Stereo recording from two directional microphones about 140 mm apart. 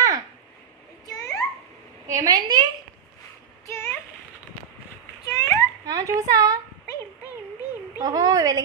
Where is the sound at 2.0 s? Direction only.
25° right (ahead or behind).